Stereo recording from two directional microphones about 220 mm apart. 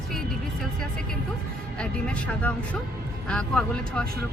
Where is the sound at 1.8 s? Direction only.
5° left (ahead or behind).